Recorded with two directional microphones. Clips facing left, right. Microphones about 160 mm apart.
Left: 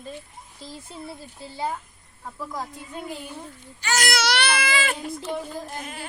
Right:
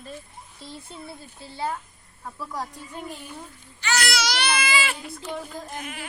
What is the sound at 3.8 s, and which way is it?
Speech, 45° left (ahead or behind).